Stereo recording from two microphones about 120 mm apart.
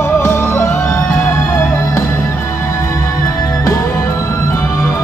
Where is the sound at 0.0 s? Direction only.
20° left (ahead or behind).